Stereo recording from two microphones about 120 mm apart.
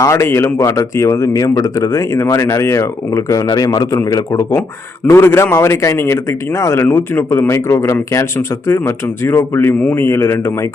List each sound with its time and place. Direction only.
0.0 s speech: 25° left (ahead or behind)
5.0 s speech: 20° left (ahead or behind)